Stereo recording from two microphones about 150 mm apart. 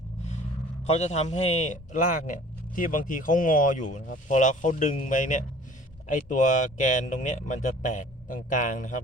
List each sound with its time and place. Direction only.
0.9 s a man's voice: 50° left (ahead or behind)